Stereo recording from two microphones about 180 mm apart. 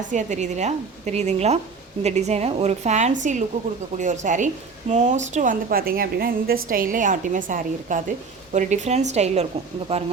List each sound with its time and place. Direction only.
0.1 s a woman's voice: 40° right (ahead or behind)